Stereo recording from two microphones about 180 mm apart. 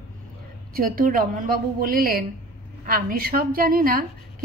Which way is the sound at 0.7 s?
50° right (ahead or behind).